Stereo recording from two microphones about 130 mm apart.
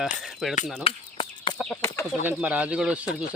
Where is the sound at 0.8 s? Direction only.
40° left (ahead or behind).